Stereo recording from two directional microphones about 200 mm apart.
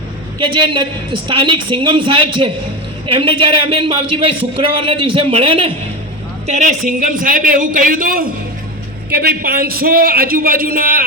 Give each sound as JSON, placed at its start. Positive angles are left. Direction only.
{"t": 0.3, "sound": "a man's voice", "side_deg": -25}